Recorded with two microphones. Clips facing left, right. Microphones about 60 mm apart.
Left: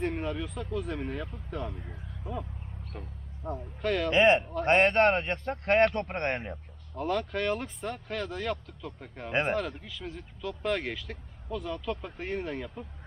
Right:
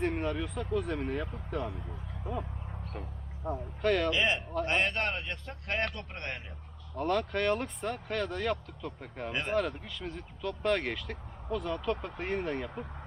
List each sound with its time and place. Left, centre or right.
0.0 s speech: centre
2.9 s speech: centre
4.1 s a man's voice: left
6.9 s speech: centre